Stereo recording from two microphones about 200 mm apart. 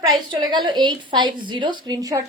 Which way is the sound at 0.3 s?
20° right (ahead or behind).